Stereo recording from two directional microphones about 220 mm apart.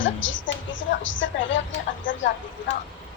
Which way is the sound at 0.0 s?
60° left (ahead or behind).